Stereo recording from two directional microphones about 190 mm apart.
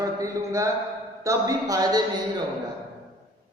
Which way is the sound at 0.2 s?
15° right (ahead or behind).